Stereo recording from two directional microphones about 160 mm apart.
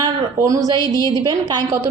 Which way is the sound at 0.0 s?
20° right (ahead or behind).